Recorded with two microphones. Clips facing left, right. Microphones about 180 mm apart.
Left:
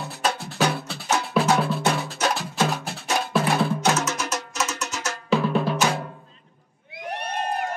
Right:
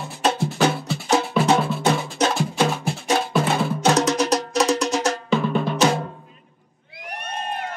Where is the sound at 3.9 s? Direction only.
35° right (ahead or behind).